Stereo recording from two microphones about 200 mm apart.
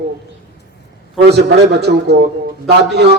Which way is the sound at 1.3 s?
55° right (ahead or behind).